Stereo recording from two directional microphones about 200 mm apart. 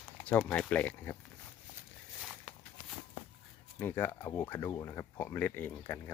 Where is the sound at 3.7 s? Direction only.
10° left (ahead or behind).